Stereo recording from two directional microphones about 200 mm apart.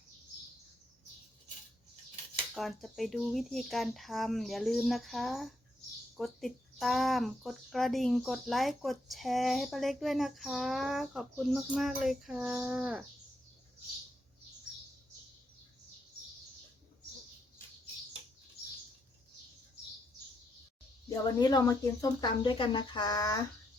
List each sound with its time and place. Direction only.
2.6 s speech: centre (ahead or behind)
21.3 s speech: 20° left (ahead or behind)